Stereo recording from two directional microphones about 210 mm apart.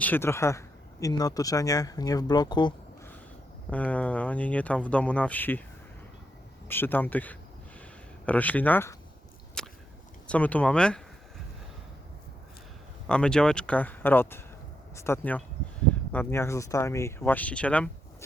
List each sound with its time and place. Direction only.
0.0 s speech: 10° left (ahead or behind)
3.7 s speech: 5° left (ahead or behind)
6.7 s speech: 10° left (ahead or behind)
9.6 s whip: 5° left (ahead or behind)
10.2 s speech: 5° left (ahead or behind)
13.1 s speech: 5° left (ahead or behind)